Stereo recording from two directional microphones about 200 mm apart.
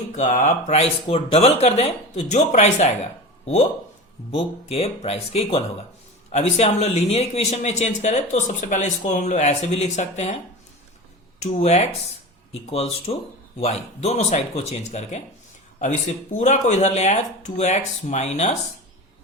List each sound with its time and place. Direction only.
0.2 s speech: 35° left (ahead or behind)
11.3 s speech: 35° left (ahead or behind)